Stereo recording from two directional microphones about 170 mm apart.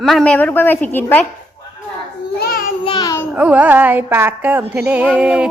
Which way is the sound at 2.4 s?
60° left (ahead or behind).